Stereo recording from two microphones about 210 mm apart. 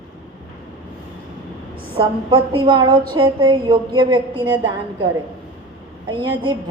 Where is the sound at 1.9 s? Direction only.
25° right (ahead or behind).